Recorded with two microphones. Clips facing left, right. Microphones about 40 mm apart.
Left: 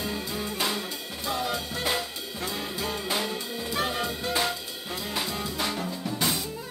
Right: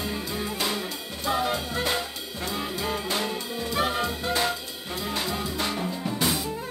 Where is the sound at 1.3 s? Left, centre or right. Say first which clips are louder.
Right 4 dB; centre.